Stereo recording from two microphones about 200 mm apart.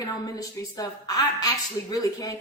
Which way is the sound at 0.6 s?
20° left (ahead or behind).